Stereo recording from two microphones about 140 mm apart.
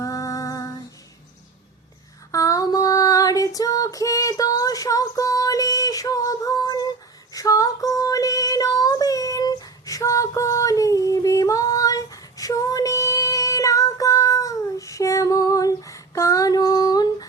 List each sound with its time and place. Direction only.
0.0 s female singing: 25° left (ahead or behind)
2.3 s female singing: 25° left (ahead or behind)